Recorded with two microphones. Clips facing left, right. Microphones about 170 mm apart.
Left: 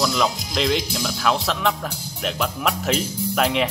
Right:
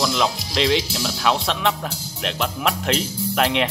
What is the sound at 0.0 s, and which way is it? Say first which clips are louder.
Speech: even; centre (ahead or behind).